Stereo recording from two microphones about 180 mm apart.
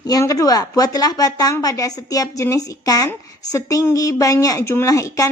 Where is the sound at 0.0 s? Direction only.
20° left (ahead or behind).